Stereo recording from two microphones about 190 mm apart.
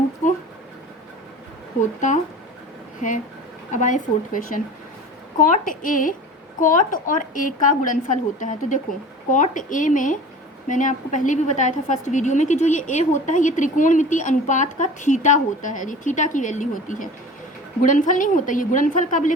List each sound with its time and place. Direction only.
3.7 s a woman's voice: 40° left (ahead or behind)